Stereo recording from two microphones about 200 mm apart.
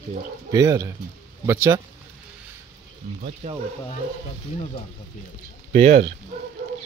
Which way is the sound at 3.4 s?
40° right (ahead or behind).